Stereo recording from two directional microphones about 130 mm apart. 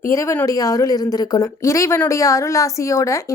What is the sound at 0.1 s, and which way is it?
A woman's voice, 25° left (ahead or behind).